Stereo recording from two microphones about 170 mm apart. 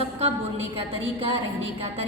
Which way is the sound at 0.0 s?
35° right (ahead or behind).